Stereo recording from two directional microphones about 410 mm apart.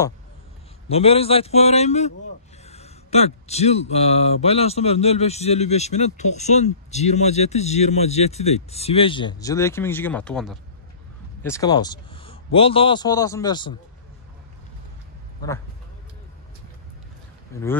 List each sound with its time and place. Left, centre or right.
0.8 s speech: centre
17.5 s speech: centre